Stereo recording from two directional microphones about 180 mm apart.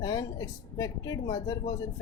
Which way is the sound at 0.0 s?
20° left (ahead or behind).